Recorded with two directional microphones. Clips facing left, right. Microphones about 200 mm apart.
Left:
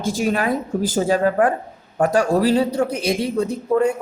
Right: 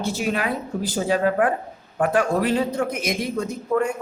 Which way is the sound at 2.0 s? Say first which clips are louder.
Left 3 dB; 40° left (ahead or behind).